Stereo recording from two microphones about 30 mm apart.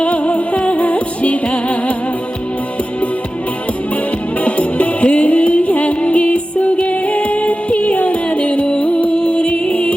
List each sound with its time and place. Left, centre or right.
0.0 s music: left
4.4 s music: left
9.1 s music: left